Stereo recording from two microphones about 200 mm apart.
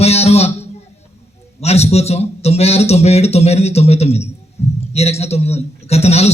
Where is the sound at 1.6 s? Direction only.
30° left (ahead or behind).